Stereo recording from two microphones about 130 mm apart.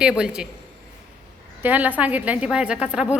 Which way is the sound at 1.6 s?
15° right (ahead or behind).